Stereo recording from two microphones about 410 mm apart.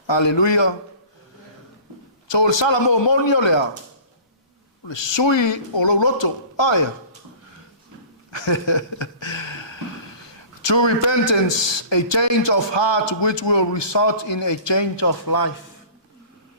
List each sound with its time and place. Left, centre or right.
0.1 s a man's voice: left
2.2 s a man's voice: left
4.9 s a man's voice: left
8.3 s a sound: left
10.6 s a man's voice: left